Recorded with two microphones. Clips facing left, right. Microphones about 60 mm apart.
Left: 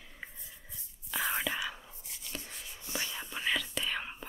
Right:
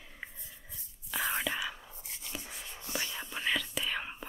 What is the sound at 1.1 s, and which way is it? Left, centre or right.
Whispering, centre.